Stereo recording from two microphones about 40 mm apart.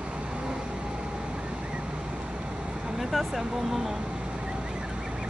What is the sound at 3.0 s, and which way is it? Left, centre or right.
Speech, centre.